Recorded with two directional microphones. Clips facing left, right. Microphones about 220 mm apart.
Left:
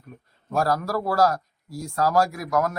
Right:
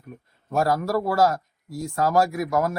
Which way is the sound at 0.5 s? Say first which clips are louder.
Right 2 dB; 20° right (ahead or behind).